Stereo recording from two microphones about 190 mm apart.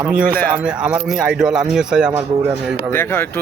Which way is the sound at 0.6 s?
5° right (ahead or behind).